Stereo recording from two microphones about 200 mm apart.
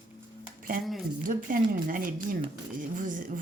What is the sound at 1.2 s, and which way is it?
Speech, 45° right (ahead or behind).